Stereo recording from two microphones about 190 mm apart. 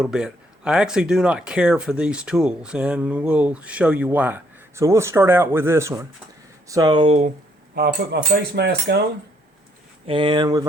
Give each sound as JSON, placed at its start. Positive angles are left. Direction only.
{"t": 0.0, "sound": "speech", "side_deg": -5}
{"t": 7.8, "sound": "speech", "side_deg": -55}
{"t": 10.1, "sound": "speech", "side_deg": -25}